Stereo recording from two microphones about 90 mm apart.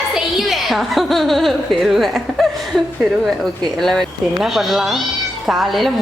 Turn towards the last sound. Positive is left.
turn(degrees=0)  # may be behind; listen again after turning